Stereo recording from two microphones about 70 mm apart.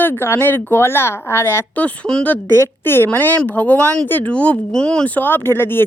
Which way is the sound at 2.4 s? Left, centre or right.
Left.